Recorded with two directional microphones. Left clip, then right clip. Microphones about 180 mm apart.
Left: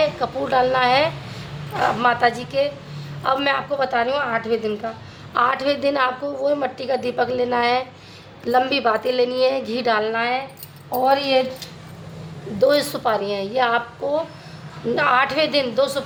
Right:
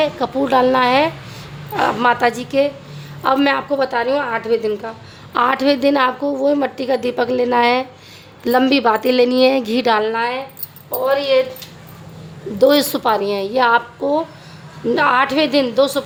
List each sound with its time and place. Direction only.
0.0 s a woman's voice: 40° right (ahead or behind)
12.5 s a woman's voice: 40° right (ahead or behind)